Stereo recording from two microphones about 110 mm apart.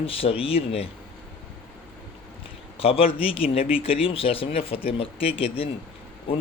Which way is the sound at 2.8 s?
60° left (ahead or behind).